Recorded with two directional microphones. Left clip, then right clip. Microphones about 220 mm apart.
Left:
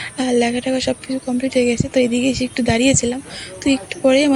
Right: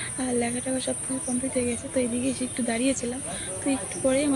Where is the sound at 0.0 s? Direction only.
35° left (ahead or behind).